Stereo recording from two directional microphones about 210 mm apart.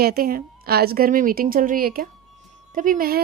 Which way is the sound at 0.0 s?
45° right (ahead or behind).